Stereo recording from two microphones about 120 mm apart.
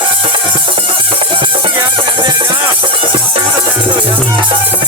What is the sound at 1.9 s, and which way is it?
Music, 40° right (ahead or behind).